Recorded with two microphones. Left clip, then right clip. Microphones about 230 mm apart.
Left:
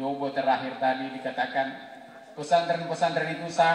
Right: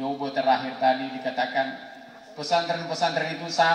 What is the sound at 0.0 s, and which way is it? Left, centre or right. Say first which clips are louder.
A man's voice: right 2 dB; right.